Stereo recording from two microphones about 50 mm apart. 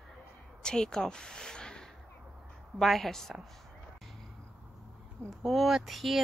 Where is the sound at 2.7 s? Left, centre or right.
Centre.